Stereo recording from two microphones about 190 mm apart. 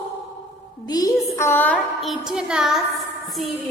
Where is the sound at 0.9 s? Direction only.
20° left (ahead or behind); by 2.8 s centre (ahead or behind).